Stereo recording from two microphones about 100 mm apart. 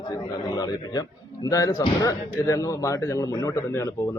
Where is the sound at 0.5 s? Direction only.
40° left (ahead or behind).